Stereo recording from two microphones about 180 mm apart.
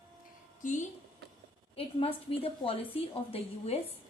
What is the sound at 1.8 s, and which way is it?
A woman's voice, 30° left (ahead or behind).